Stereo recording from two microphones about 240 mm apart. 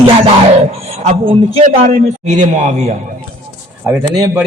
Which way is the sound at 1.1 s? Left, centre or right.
Right.